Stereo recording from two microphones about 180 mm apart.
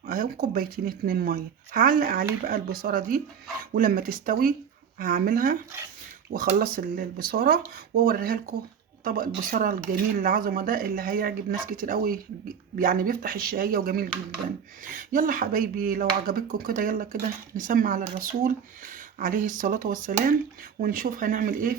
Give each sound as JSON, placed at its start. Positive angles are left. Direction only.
{"t": 0.0, "sound": "speech", "side_deg": -50}
{"t": 6.6, "sound": "speech", "side_deg": -55}